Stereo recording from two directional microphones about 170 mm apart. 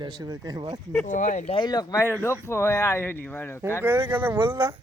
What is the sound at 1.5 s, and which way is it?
Speech, 25° left (ahead or behind).